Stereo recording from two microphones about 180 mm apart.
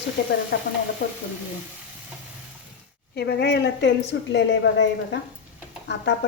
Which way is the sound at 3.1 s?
65° left (ahead or behind).